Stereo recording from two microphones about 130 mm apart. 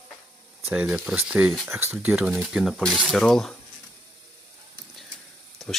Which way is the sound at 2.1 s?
Centre (ahead or behind).